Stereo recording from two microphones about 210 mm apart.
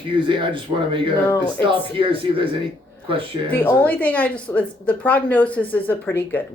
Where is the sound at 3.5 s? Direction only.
10° left (ahead or behind).